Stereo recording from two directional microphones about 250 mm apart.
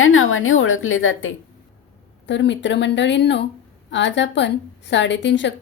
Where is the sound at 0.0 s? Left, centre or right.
Left.